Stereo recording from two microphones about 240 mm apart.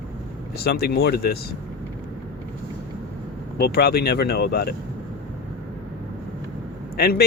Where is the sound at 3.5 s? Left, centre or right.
Left.